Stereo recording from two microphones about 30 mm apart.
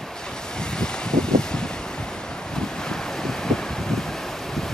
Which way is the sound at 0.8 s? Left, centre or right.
Left.